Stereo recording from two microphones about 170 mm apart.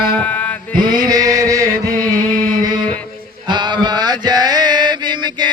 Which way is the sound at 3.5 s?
25° right (ahead or behind).